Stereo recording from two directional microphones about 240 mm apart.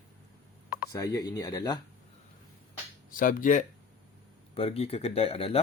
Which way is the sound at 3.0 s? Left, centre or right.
Left.